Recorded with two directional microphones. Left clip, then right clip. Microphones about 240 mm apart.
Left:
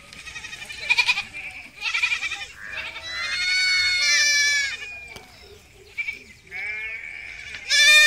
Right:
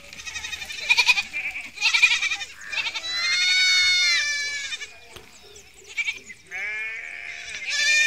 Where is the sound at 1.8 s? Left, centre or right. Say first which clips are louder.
Right 5 dB; right.